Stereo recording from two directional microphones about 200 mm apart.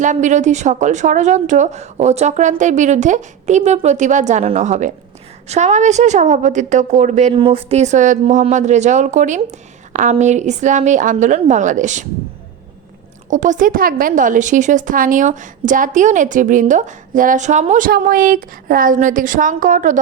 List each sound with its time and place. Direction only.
0.0 s a woman's voice: 40° right (ahead or behind)
13.3 s a woman's voice: 40° right (ahead or behind)